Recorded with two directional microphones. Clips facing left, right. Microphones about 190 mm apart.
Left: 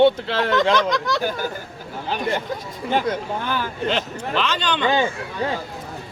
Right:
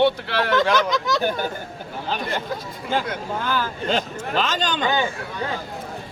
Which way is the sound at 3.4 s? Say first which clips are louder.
Right 1 dB; 20° left (ahead or behind).